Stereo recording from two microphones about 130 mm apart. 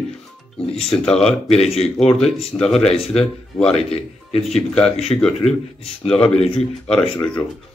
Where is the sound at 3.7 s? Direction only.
50° left (ahead or behind).